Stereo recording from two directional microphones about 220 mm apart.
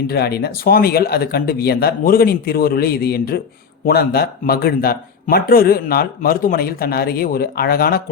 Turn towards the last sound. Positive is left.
turn(degrees=45)  # may be behind; listen again after turning